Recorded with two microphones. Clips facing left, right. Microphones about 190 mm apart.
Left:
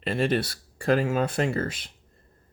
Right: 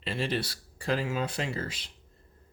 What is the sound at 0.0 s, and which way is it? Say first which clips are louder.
Speech: left 6 dB; 55° left (ahead or behind).